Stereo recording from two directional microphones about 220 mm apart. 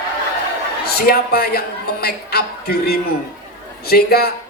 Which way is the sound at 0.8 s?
45° left (ahead or behind).